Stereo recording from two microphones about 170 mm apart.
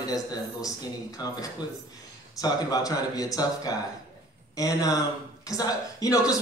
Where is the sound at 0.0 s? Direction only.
20° left (ahead or behind).